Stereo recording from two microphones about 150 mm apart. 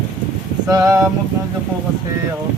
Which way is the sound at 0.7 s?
20° right (ahead or behind).